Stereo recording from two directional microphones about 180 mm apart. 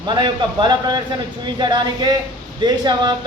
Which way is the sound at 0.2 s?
25° right (ahead or behind).